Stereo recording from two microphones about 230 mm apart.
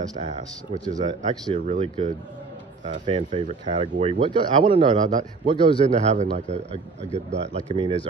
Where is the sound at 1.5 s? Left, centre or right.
Right.